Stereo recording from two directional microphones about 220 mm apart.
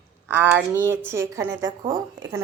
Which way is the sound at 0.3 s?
5° right (ahead or behind).